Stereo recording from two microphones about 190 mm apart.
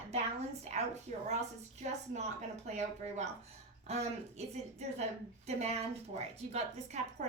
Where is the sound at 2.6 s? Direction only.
35° right (ahead or behind).